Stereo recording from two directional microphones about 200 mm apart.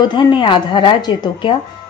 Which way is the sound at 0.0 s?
25° left (ahead or behind).